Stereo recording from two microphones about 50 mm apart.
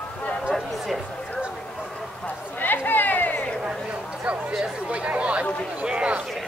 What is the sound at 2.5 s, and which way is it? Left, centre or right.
Chatter, left.